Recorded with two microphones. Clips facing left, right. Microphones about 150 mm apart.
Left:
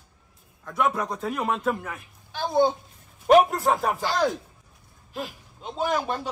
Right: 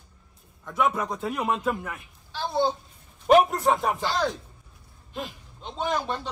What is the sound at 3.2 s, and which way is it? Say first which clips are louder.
Speech: left 1 dB; centre (ahead or behind).